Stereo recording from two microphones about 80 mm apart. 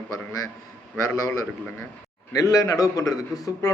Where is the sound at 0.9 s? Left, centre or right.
Left.